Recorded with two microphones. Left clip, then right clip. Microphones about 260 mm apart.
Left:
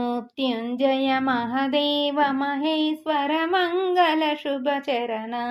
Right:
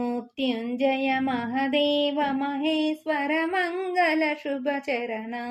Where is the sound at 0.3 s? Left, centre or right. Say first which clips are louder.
Left 1 dB; centre.